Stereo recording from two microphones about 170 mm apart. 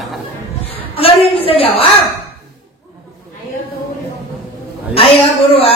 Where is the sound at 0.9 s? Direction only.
35° left (ahead or behind).